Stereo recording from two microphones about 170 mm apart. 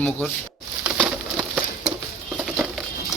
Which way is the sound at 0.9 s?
Centre (ahead or behind).